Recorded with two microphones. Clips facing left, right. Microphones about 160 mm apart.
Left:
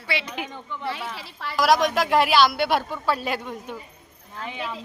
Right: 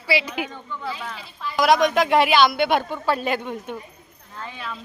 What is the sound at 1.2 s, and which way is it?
Speech, 75° left (ahead or behind).